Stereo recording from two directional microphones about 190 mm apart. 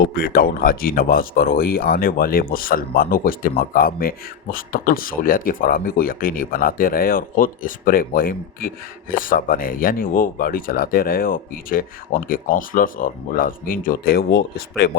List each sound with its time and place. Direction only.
0.0 s speech: 55° left (ahead or behind)